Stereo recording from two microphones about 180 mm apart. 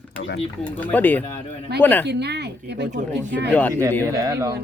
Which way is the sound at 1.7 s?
65° right (ahead or behind).